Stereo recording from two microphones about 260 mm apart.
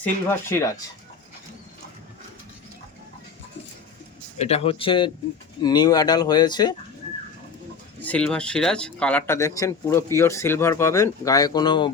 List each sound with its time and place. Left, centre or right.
0.0 s speech: centre
4.4 s speech: left
8.0 s speech: centre